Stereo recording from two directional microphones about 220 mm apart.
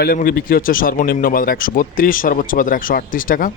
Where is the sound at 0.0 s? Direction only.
40° left (ahead or behind).